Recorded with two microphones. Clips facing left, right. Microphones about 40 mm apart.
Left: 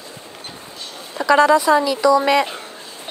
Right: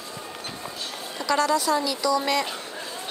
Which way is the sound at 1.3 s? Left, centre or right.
Left.